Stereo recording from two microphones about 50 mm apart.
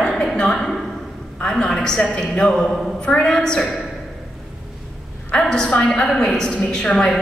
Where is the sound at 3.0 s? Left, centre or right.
Centre.